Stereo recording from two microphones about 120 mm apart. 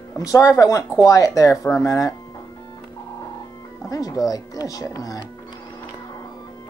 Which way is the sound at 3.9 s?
30° left (ahead or behind).